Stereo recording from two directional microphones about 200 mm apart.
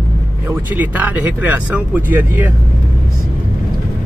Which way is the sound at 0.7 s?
10° right (ahead or behind).